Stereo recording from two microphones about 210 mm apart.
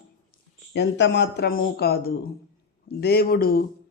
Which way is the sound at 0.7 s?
55° left (ahead or behind).